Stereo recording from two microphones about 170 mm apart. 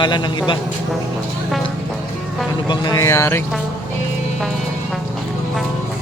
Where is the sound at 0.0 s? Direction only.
25° left (ahead or behind).